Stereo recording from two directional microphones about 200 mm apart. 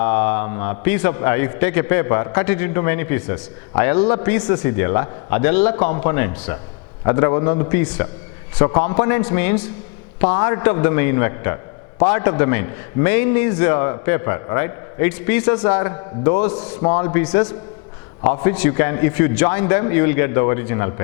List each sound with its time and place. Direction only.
0.0 s a man's voice: 15° left (ahead or behind)